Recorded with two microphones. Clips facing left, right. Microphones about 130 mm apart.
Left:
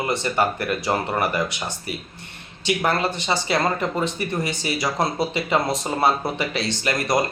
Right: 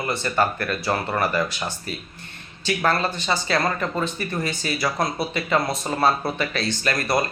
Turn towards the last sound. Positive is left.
turn(degrees=20)  # may be behind; listen again after turning